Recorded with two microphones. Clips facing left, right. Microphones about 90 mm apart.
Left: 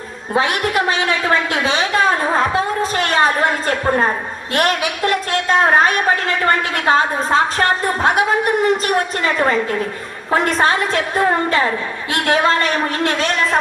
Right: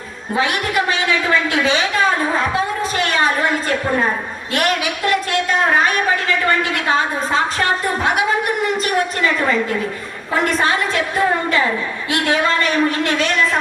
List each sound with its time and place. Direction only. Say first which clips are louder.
0.3 s a woman's voice: left 2 dB; 35° left (ahead or behind)
2.9 s a woman's voice: left 2 dB; 40° left (ahead or behind)
9.2 s a woman's voice: left 1 dB; 40° left (ahead or behind)